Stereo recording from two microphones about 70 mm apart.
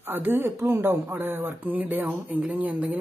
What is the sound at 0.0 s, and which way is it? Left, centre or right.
Speech, right.